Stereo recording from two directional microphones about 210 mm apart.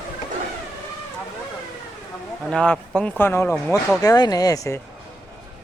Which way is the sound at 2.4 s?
5° left (ahead or behind).